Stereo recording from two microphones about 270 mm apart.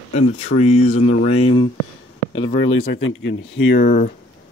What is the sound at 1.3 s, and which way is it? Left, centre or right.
Speech, left.